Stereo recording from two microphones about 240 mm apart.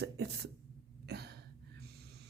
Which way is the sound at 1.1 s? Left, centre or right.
Right.